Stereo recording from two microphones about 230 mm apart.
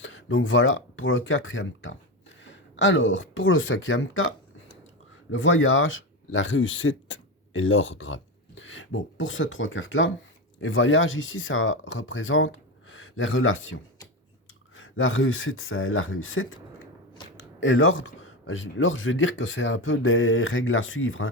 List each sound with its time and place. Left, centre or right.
0.0 s speech: left